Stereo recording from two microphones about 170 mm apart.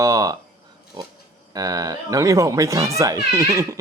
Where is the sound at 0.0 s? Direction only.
20° right (ahead or behind).